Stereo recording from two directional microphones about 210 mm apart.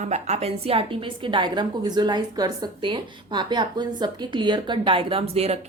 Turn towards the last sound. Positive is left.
turn(degrees=-30)  # may be behind; listen again after turning